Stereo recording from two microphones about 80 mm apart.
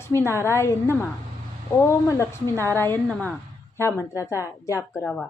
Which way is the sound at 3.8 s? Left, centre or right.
Left.